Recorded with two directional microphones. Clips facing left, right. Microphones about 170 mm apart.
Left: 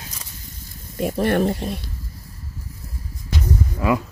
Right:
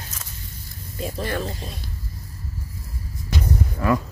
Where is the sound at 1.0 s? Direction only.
60° left (ahead or behind).